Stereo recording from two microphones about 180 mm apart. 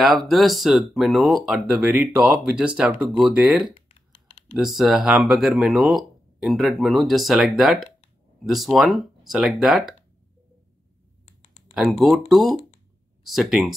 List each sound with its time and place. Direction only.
0.0 s speech: centre (ahead or behind)
3.7 s computer keyboard: 30° left (ahead or behind)
4.6 s speech: centre (ahead or behind)
11.2 s a sound: 35° left (ahead or behind)
11.7 s speech: centre (ahead or behind)